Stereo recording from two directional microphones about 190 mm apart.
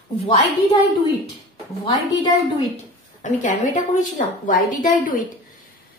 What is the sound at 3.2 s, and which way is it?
A woman's voice, 40° left (ahead or behind).